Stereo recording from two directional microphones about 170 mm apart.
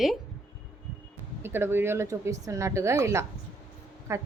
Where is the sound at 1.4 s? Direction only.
15° right (ahead or behind).